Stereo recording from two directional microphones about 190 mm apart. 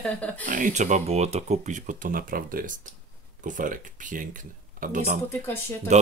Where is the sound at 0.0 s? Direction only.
10° left (ahead or behind).